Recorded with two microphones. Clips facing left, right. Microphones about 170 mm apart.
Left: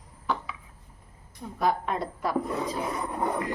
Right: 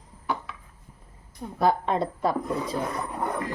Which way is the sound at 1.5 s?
30° right (ahead or behind).